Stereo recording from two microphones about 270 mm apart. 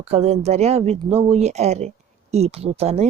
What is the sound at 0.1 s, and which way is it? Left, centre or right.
Speech, right.